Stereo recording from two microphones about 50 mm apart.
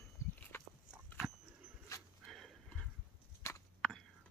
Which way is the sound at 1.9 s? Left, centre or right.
Left.